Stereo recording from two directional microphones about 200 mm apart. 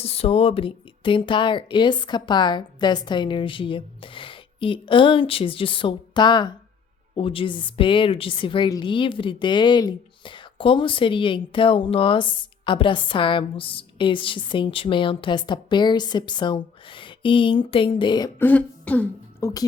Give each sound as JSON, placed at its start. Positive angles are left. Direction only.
{"t": 0.0, "sound": "a woman's voice", "side_deg": 30}
{"t": 18.3, "sound": "speech", "side_deg": 10}